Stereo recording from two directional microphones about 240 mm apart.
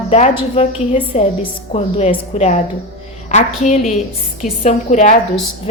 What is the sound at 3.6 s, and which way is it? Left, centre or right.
A woman's voice, left.